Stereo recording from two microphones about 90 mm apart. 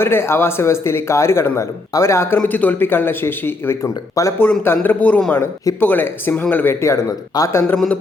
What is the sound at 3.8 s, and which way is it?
Speech, 40° left (ahead or behind).